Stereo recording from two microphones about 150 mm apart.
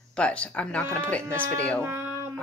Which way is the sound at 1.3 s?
10° left (ahead or behind).